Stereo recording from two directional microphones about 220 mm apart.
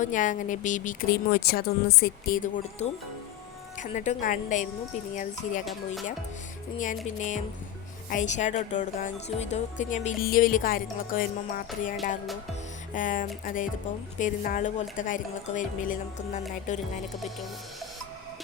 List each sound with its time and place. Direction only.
0.0 s speech: 35° left (ahead or behind)
5.6 s music: centre (ahead or behind)
6.7 s speech: 35° left (ahead or behind)